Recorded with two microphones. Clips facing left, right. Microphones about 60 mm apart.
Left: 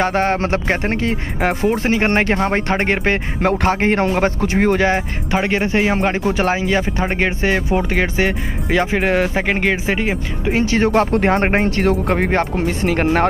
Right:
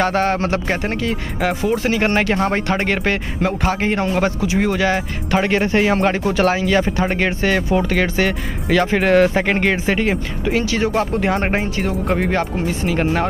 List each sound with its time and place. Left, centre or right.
0.0 s speech: left
1.9 s speech: left
5.3 s speech: centre
10.5 s speech: left
10.9 s speech: left
11.6 s speech: left